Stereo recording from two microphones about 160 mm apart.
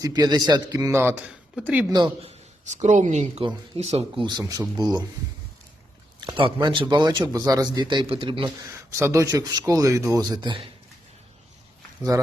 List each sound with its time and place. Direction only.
0.0 s a man's voice: 25° right (ahead or behind); by 1.9 s 10° right (ahead or behind)
2.2 s speech: 45° right (ahead or behind)
4.3 s a man's voice: 25° right (ahead or behind)
6.1 s a man's voice: 30° right (ahead or behind)
8.9 s a man's voice: 15° right (ahead or behind)